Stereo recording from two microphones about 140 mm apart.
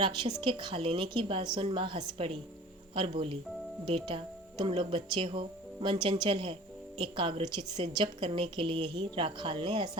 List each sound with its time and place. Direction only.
0.0 s a woman's voice: 35° right (ahead or behind)